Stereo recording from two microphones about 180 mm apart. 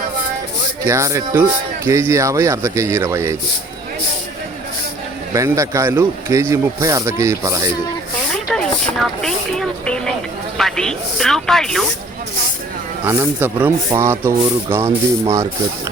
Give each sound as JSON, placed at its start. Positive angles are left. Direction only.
{"t": 0.9, "sound": "speech", "side_deg": -15}
{"t": 5.3, "sound": "speech", "side_deg": -15}
{"t": 8.3, "sound": "snake", "side_deg": 5}
{"t": 9.0, "sound": "a woman's voice", "side_deg": 5}
{"t": 13.1, "sound": "speech", "side_deg": -10}